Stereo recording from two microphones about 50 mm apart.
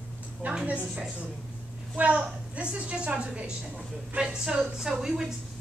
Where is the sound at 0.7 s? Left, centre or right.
Right.